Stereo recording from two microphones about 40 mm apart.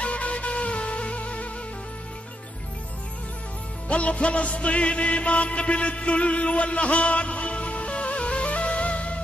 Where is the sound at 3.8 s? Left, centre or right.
Left.